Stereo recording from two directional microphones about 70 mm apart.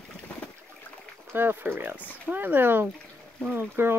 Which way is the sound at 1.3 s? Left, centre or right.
Right.